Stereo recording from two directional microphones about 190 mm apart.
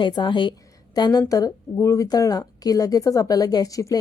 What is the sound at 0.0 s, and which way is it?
A woman's voice, 25° left (ahead or behind).